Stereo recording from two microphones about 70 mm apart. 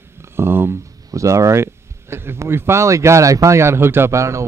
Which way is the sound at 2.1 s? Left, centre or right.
Right.